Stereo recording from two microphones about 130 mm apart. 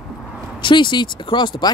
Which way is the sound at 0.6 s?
35° left (ahead or behind).